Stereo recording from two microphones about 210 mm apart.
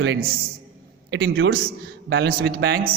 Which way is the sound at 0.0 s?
50° right (ahead or behind).